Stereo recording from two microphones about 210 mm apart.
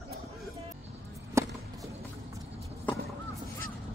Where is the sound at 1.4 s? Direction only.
15° right (ahead or behind).